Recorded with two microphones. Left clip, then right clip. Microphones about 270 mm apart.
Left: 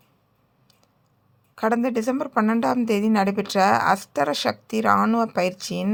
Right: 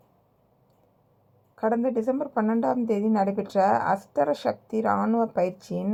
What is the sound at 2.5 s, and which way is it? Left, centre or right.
Speech, left.